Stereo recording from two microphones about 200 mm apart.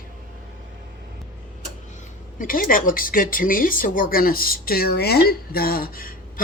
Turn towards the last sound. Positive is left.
turn(degrees=45)  # may be behind; listen again after turning